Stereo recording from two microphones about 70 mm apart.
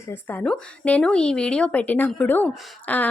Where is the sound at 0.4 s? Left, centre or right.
Centre.